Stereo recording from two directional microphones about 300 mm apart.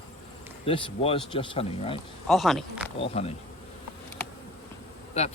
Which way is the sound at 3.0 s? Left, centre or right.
Centre.